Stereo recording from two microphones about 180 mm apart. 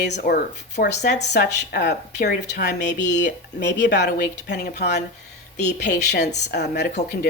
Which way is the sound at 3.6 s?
75° left (ahead or behind).